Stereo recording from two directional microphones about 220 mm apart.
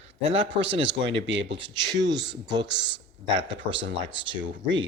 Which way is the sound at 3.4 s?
55° right (ahead or behind).